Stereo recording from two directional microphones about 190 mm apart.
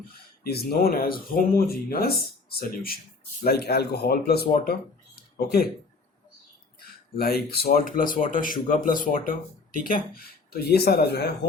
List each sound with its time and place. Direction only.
0.1 s speech: 55° left (ahead or behind)
6.7 s a sound: 50° left (ahead or behind)
7.5 s speech: 55° left (ahead or behind)